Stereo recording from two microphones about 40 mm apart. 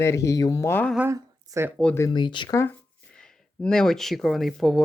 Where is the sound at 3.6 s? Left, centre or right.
Centre.